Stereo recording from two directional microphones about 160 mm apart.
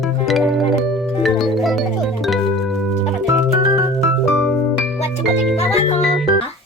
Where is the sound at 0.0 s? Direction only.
Centre (ahead or behind).